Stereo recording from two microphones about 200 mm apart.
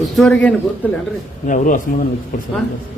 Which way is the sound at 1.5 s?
40° left (ahead or behind).